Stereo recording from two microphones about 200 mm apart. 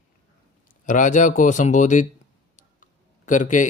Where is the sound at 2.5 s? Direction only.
40° left (ahead or behind).